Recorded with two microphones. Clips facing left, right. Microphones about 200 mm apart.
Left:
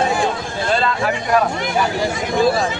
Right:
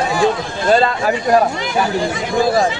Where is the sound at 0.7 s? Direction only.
40° right (ahead or behind).